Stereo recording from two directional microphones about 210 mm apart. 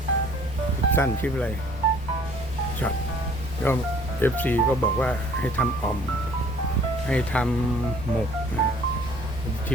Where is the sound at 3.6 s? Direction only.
10° left (ahead or behind).